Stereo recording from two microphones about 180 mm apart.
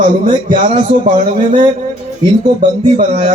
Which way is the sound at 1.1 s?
45° right (ahead or behind).